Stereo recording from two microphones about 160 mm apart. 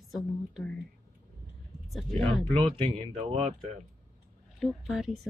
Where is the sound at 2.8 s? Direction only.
35° right (ahead or behind).